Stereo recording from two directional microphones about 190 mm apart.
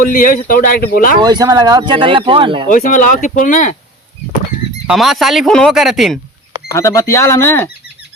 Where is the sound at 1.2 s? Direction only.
20° right (ahead or behind).